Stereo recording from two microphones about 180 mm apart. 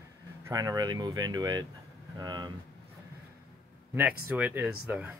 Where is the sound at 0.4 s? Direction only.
20° right (ahead or behind).